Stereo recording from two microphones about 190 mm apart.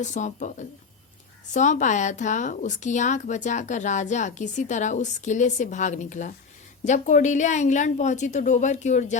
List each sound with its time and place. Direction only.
0.0 s speech: 40° left (ahead or behind)